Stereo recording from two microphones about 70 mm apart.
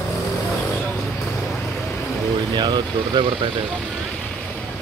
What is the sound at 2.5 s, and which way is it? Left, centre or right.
Vehicle, right.